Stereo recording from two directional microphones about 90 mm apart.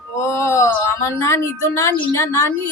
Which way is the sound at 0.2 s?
30° left (ahead or behind).